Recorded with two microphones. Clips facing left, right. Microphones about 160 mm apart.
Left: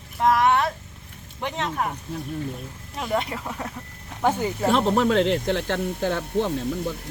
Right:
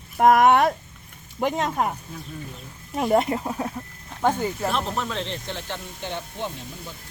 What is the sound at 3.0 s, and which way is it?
Speech, 45° right (ahead or behind).